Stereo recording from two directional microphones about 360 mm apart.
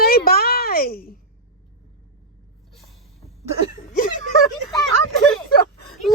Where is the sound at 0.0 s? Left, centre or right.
Left.